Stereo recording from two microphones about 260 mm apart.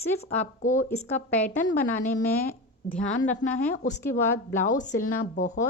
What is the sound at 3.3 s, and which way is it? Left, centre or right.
Speech, left.